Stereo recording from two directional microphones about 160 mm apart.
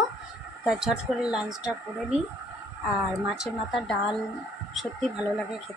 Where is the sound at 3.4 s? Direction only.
Centre (ahead or behind).